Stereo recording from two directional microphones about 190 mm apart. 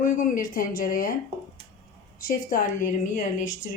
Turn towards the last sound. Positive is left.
turn(degrees=40)  # may be behind; listen again after turning